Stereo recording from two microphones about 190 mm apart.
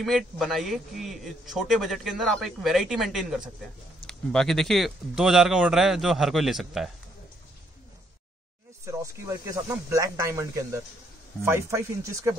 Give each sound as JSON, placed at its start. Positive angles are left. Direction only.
{"t": 0.0, "sound": "a man's voice", "side_deg": 0}
{"t": 8.8, "sound": "speech", "side_deg": -15}